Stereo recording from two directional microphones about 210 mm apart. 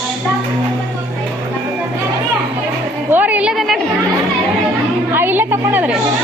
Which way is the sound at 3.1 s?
5° right (ahead or behind).